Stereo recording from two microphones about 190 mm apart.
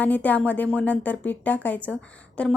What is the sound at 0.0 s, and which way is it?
A woman's voice, 10° left (ahead or behind).